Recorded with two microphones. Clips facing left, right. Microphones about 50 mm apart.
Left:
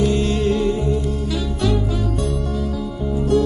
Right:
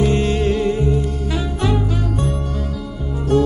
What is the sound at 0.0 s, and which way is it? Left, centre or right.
Music, right.